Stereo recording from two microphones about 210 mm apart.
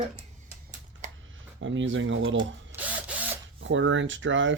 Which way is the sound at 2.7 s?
5° right (ahead or behind).